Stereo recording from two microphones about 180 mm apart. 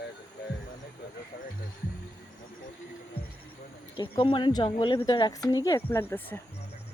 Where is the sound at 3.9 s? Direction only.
30° left (ahead or behind); by 6.4 s 10° left (ahead or behind).